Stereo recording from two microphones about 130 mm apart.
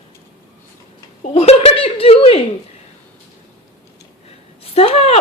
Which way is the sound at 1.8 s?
45° left (ahead or behind).